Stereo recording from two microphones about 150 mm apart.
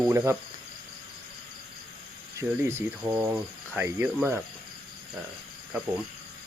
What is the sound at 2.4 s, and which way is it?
Cricket, 20° right (ahead or behind).